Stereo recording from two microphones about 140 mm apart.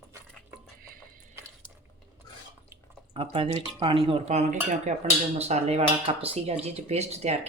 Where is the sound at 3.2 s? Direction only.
45° right (ahead or behind).